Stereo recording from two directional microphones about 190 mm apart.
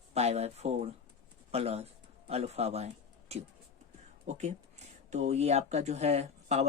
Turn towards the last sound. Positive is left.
turn(degrees=-35)  # may be behind; listen again after turning